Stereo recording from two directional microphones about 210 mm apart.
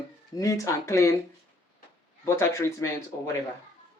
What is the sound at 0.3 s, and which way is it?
Speech, 15° left (ahead or behind).